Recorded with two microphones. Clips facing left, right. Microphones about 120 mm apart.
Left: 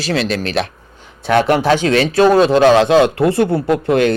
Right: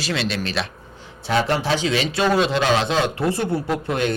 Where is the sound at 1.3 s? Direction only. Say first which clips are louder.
Left 8 dB; 60° left (ahead or behind).